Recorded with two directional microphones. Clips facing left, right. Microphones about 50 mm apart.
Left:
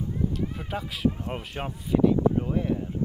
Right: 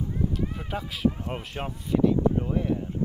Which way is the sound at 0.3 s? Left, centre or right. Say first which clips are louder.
Even; centre.